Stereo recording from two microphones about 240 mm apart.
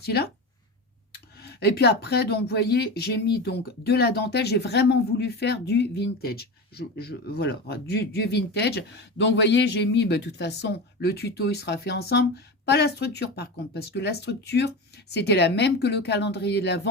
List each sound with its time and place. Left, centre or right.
0.0 s speech: left